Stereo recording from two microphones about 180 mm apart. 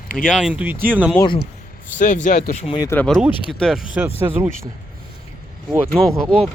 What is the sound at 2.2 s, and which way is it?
Speech, 40° left (ahead or behind).